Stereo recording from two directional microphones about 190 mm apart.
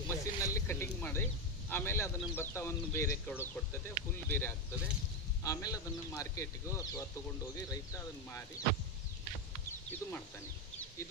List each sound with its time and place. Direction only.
0.1 s a sound: 15° left (ahead or behind)
1.7 s speech: 10° left (ahead or behind)
9.6 s chicken: 10° left (ahead or behind)